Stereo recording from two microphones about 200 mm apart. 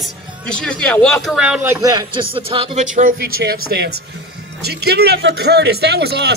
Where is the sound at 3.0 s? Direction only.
45° right (ahead or behind).